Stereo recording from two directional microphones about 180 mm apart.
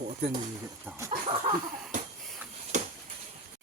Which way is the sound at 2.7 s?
40° right (ahead or behind).